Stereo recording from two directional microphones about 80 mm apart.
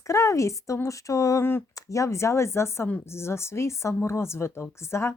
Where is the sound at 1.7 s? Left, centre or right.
Left.